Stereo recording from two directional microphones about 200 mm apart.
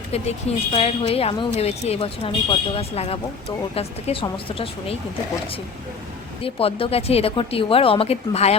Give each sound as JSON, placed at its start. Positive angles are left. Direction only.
{"t": 0.1, "sound": "a woman's voice", "side_deg": 30}
{"t": 6.4, "sound": "a woman's voice", "side_deg": 30}